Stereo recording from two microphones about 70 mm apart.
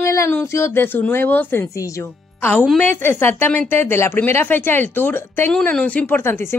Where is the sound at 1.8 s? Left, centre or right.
Left.